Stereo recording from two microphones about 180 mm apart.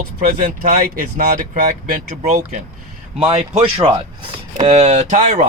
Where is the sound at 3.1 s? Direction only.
35° right (ahead or behind).